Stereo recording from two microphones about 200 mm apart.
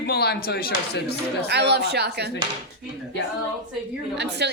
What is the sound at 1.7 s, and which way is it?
Speech, 55° right (ahead or behind).